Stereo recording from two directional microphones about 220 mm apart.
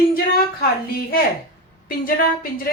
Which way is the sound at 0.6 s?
45° left (ahead or behind).